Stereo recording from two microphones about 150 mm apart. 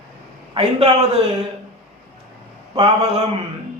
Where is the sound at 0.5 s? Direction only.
40° right (ahead or behind).